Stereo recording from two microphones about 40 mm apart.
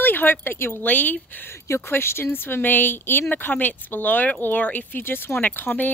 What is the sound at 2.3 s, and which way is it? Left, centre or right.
Speech, left.